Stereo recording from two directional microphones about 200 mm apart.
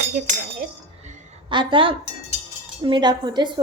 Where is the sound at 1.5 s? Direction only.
25° right (ahead or behind).